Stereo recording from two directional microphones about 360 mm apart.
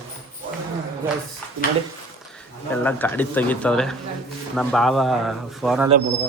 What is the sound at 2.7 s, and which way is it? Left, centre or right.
A man's voice, centre.